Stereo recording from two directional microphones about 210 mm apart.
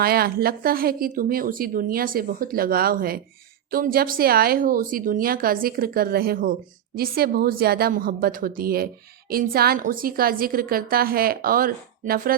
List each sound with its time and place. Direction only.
0.0 s speech: 45° right (ahead or behind)